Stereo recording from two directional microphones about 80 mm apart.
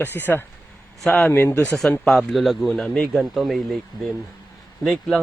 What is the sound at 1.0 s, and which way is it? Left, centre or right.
Speech, centre.